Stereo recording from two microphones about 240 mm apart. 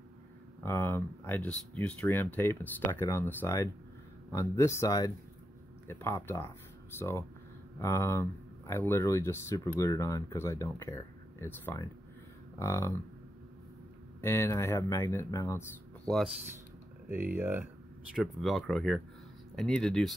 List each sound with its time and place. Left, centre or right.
0.7 s speech: centre
14.2 s speech: centre
17.1 s speech: centre